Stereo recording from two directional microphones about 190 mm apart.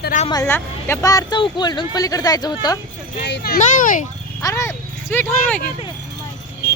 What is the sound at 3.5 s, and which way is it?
Speech, 45° left (ahead or behind).